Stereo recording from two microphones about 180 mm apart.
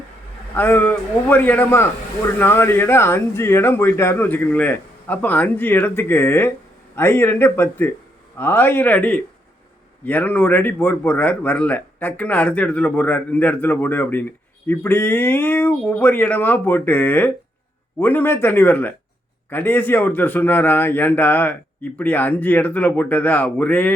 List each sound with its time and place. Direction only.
0.5 s speech: 10° left (ahead or behind)